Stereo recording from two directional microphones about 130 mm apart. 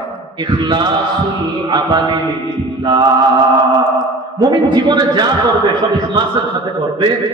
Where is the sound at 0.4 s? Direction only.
35° right (ahead or behind).